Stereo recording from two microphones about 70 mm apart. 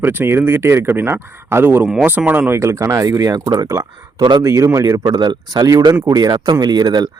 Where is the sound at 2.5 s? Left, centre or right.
Right.